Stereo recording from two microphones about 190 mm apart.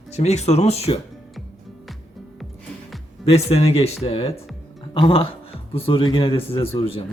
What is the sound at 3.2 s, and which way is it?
Speech, 30° left (ahead or behind).